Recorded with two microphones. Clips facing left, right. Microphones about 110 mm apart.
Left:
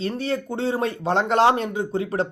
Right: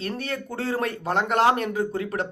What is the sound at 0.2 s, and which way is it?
A man's voice, 25° left (ahead or behind).